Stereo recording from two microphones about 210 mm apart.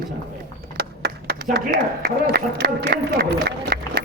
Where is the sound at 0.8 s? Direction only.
50° right (ahead or behind).